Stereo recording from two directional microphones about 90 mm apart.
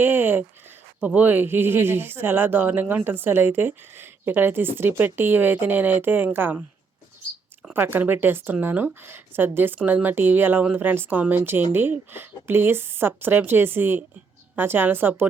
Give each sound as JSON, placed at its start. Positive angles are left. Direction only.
{"t": 0.0, "sound": "a sound", "side_deg": -25}
{"t": 0.9, "sound": "a woman's voice", "side_deg": -20}
{"t": 7.7, "sound": "a woman's voice", "side_deg": -20}